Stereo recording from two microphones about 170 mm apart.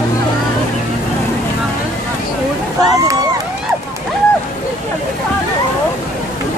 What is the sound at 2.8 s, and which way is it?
Run, 20° right (ahead or behind).